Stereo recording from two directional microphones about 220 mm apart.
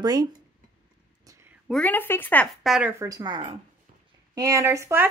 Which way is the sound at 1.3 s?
10° right (ahead or behind).